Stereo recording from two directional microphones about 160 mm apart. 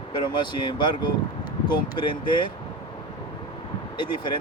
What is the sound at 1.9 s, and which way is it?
Speech, 30° left (ahead or behind).